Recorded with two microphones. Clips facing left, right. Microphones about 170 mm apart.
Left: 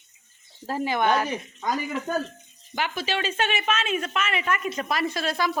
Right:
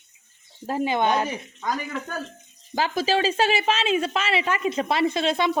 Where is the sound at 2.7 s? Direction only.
35° right (ahead or behind).